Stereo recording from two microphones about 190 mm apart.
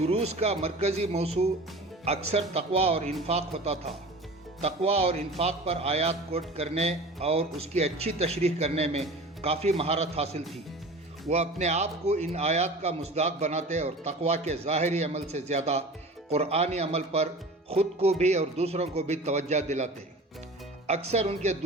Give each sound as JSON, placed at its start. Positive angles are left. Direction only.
{"t": 0.0, "sound": "speech", "side_deg": -35}